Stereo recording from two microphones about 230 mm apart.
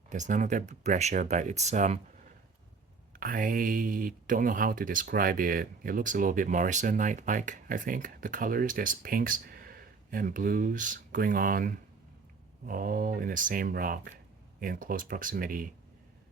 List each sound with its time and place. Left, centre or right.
0.1 s speech: right
3.2 s speech: right